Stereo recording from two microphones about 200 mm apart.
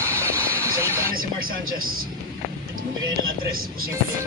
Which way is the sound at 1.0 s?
45° right (ahead or behind).